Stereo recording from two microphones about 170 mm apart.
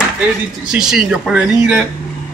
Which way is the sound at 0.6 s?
5° right (ahead or behind).